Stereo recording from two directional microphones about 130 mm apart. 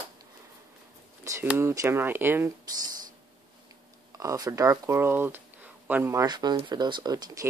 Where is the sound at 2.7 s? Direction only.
30° right (ahead or behind).